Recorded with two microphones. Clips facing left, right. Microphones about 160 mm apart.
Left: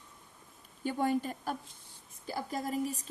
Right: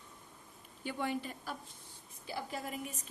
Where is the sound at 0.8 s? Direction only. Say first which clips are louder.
Left 6 dB; 40° left (ahead or behind).